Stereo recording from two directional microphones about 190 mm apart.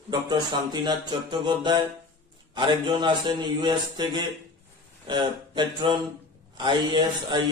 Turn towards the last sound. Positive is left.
turn(degrees=-25)  # may be behind; listen again after turning